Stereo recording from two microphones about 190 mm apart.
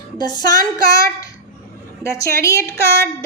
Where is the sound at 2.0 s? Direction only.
15° left (ahead or behind).